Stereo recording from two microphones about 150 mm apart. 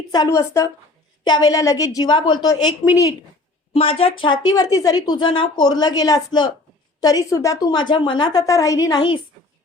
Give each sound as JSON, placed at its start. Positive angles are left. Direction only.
{"t": 0.1, "sound": "a woman's voice", "side_deg": 25}
{"t": 3.7, "sound": "a woman's voice", "side_deg": 40}